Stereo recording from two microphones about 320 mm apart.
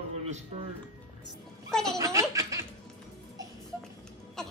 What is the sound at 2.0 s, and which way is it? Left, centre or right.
Snicker, centre.